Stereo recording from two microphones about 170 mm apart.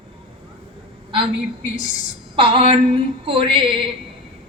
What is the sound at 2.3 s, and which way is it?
Speech, 30° right (ahead or behind).